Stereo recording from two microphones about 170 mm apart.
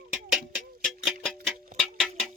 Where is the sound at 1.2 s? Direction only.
Centre (ahead or behind).